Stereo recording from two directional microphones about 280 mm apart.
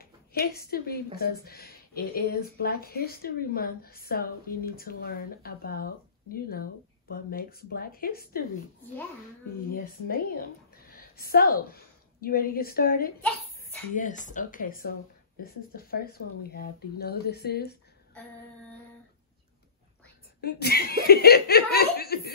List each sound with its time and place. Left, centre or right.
0.0 s a woman's voice: left
9.7 s a woman's voice: left
20.3 s a woman's voice: left